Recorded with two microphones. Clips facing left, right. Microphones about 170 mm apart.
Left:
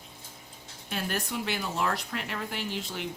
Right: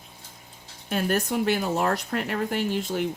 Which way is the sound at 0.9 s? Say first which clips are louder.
Right 8 dB; 50° right (ahead or behind).